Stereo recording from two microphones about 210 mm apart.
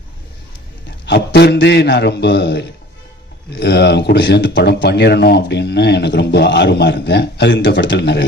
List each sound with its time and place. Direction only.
1.0 s speech: 55° left (ahead or behind)